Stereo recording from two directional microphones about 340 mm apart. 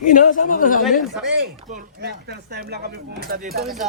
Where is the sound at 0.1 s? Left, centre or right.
Left.